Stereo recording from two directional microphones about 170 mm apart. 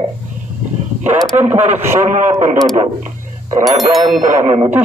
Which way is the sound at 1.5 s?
10° right (ahead or behind).